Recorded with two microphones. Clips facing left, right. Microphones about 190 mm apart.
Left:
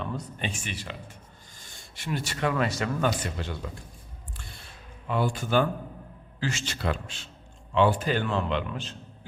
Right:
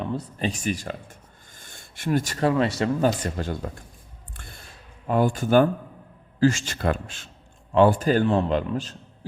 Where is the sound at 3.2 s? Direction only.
45° right (ahead or behind).